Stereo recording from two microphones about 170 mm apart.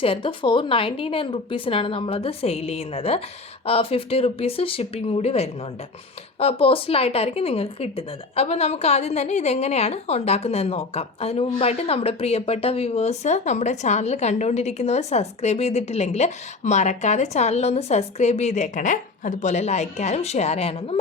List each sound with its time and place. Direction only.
0.0 s speech: 30° left (ahead or behind)